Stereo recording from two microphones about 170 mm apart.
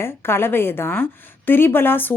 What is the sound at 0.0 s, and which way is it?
A woman's voice, 15° left (ahead or behind).